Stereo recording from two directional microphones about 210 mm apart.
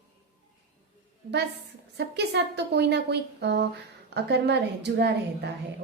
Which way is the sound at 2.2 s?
55° right (ahead or behind).